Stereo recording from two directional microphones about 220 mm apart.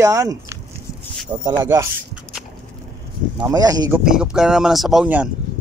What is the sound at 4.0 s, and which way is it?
Speech, 5° right (ahead or behind).